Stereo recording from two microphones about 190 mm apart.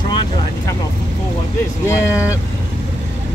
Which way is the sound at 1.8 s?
15° left (ahead or behind).